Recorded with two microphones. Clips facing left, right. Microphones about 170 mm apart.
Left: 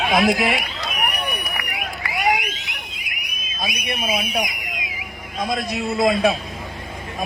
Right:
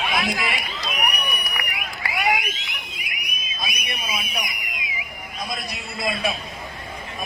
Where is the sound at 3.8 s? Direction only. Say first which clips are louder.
Left 11 dB; 60° left (ahead or behind).